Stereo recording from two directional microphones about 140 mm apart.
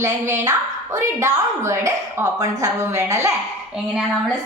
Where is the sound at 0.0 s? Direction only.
20° right (ahead or behind).